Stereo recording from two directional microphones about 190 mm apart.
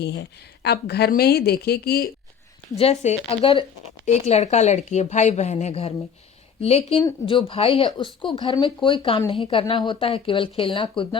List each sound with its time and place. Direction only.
0.0 s a woman's voice: 65° left (ahead or behind)
2.7 s a woman's voice: 35° left (ahead or behind)